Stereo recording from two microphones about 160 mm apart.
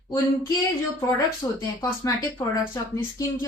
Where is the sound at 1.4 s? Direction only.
30° left (ahead or behind).